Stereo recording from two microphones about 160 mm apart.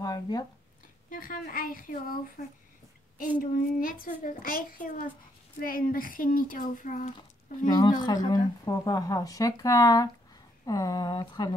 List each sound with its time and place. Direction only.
0.0 s speech: 25° left (ahead or behind)
1.1 s a woman's voice: 60° left (ahead or behind)
3.3 s a woman's voice: 60° left (ahead or behind)
7.2 s speech: 30° left (ahead or behind)